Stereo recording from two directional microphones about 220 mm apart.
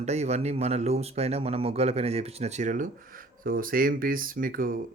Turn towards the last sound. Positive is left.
turn(degrees=-40)  # may be behind; listen again after turning